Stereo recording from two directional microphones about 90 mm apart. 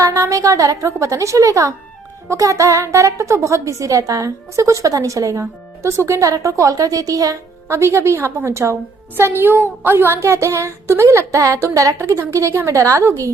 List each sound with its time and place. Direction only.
0.0 s a woman's voice: 30° right (ahead or behind)